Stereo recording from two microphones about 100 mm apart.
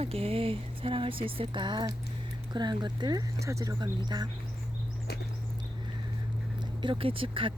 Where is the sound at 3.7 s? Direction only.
45° right (ahead or behind).